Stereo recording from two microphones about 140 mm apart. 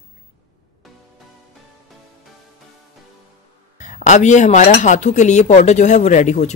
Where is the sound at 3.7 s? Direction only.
60° left (ahead or behind).